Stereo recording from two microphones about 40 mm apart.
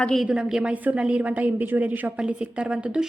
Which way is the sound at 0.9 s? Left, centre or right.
Right.